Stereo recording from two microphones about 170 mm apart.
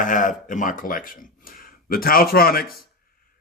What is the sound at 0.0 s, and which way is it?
A man's voice, 50° left (ahead or behind).